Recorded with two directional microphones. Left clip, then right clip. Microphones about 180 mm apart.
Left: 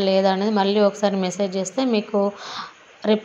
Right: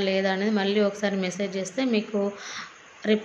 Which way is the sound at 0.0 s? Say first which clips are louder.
Left 6 dB; 20° left (ahead or behind).